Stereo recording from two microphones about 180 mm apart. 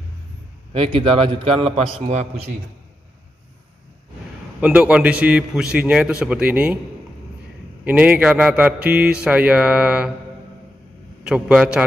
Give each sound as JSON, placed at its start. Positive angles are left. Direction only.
{"t": 0.7, "sound": "a man's voice", "side_deg": -30}
{"t": 4.6, "sound": "a man's voice", "side_deg": -5}
{"t": 7.8, "sound": "a man's voice", "side_deg": -10}
{"t": 11.2, "sound": "a man's voice", "side_deg": -5}